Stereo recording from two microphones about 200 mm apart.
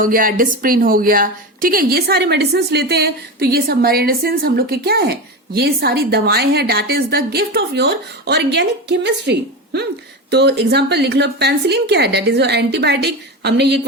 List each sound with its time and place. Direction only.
0.0 s a woman's voice: 45° right (ahead or behind)